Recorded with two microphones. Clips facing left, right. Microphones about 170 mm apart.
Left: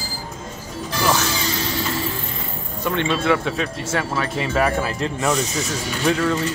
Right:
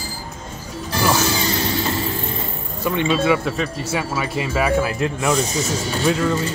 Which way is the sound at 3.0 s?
5° right (ahead or behind).